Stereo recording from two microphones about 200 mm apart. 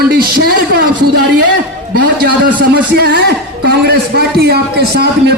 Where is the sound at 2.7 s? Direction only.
55° right (ahead or behind).